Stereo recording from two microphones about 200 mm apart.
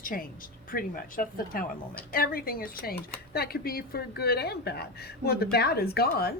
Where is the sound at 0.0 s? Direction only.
45° left (ahead or behind).